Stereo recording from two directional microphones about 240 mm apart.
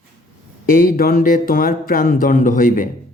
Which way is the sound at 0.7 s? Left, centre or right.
Left.